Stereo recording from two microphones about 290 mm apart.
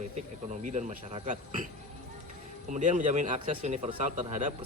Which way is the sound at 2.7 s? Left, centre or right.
Right.